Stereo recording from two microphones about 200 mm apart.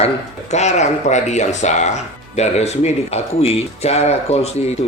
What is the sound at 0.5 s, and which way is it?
Speech, 35° left (ahead or behind).